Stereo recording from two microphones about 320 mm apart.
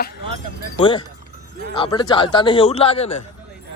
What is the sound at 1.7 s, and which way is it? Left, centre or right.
A man's voice, centre.